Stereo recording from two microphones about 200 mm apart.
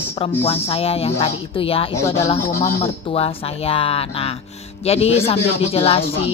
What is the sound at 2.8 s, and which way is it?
Speech, 30° left (ahead or behind).